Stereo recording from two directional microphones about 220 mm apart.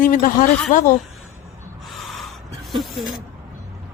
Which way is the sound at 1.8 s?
Centre (ahead or behind).